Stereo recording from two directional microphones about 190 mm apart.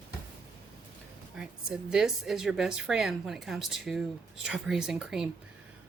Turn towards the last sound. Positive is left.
turn(degrees=-5)  # may be behind; listen again after turning